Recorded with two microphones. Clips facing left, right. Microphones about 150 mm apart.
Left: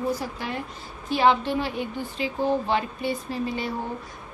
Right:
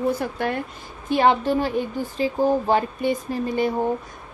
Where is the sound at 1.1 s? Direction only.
45° right (ahead or behind).